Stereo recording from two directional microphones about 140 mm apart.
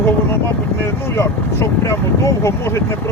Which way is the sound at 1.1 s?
20° left (ahead or behind).